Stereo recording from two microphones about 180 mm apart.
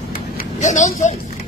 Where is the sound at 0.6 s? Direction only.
40° left (ahead or behind).